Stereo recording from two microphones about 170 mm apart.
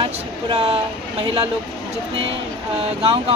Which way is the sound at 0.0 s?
30° right (ahead or behind).